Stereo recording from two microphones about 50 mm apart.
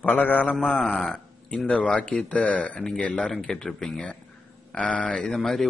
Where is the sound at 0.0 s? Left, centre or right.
Left.